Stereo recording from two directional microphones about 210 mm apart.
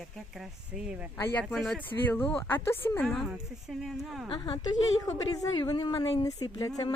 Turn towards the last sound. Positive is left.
turn(degrees=15)  # may be behind; listen again after turning